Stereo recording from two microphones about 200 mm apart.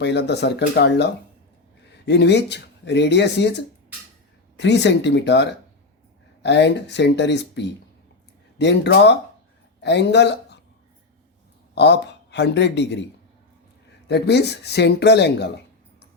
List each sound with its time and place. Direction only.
0.0 s a woman's voice: 55° left (ahead or behind)
11.7 s a man's voice: 55° left (ahead or behind)
14.1 s speech: 55° left (ahead or behind)